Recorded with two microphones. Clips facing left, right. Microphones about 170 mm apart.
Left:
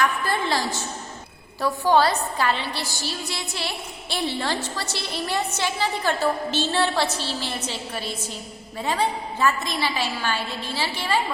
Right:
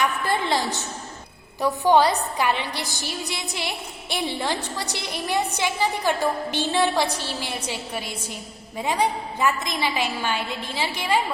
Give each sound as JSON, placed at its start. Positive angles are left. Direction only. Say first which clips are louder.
{"t": 0.0, "sound": "a woman's voice", "louder": "even", "side_deg": -20}